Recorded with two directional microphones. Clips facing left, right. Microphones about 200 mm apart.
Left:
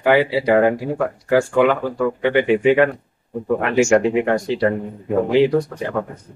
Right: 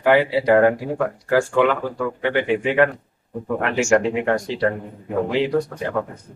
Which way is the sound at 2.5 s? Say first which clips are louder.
Left 3 dB; centre (ahead or behind).